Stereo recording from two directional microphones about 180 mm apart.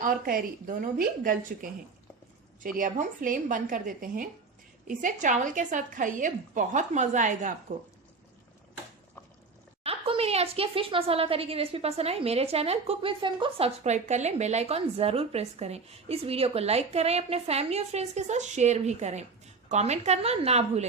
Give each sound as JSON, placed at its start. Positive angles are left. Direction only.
{"t": 0.0, "sound": "a woman's voice", "side_deg": -50}
{"t": 9.8, "sound": "a woman's voice", "side_deg": -35}